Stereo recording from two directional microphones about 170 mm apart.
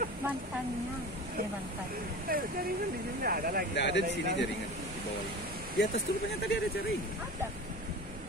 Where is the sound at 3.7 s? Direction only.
90° left.